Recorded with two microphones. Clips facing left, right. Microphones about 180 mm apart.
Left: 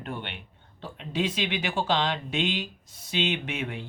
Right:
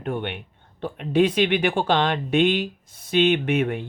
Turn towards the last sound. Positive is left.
turn(degrees=-55)  # may be behind; listen again after turning